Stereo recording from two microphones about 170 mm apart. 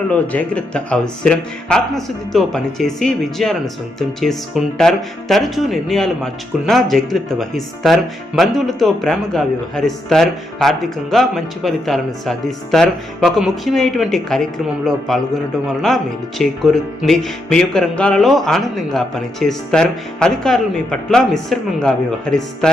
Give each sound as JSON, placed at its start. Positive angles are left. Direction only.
{"t": 0.1, "sound": "speech", "side_deg": 10}